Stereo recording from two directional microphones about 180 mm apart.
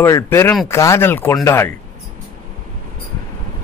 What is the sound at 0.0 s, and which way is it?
Speech, 15° left (ahead or behind).